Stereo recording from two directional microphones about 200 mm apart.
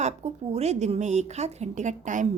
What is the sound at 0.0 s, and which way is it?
A woman's voice, 35° right (ahead or behind).